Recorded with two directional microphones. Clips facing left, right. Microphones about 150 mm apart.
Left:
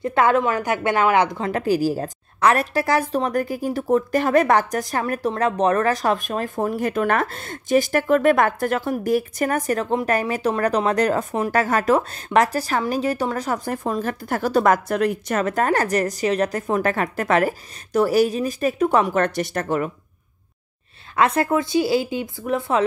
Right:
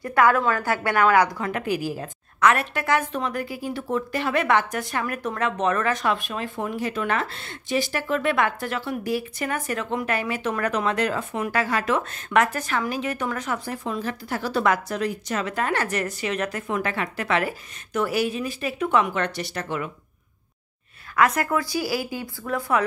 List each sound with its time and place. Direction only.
0.0 s a woman's voice: 25° left (ahead or behind)
1.5 s a woman's voice: 35° left (ahead or behind)
13.7 s a woman's voice: 45° left (ahead or behind)
21.2 s a woman's voice: 25° left (ahead or behind)